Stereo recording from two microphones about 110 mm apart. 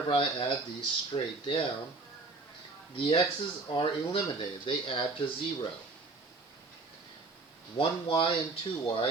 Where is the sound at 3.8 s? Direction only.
50° left (ahead or behind).